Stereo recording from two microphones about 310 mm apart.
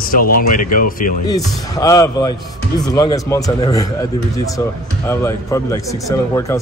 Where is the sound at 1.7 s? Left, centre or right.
Centre.